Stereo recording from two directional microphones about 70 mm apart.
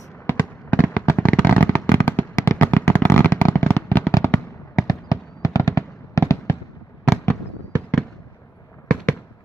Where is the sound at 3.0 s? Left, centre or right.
Left.